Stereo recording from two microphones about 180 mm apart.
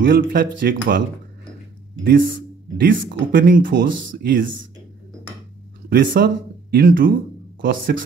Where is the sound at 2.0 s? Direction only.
50° right (ahead or behind).